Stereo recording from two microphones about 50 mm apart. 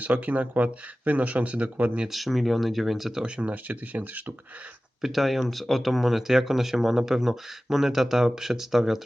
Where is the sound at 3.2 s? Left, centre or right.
Right.